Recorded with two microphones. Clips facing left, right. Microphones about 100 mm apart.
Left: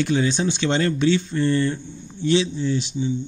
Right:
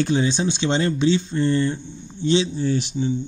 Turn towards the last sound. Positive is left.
turn(degrees=-50)  # may be behind; listen again after turning